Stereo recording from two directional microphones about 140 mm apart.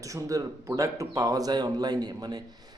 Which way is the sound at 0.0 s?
25° right (ahead or behind).